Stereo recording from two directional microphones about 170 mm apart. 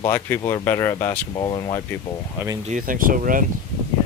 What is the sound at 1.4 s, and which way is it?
Speech, 25° left (ahead or behind).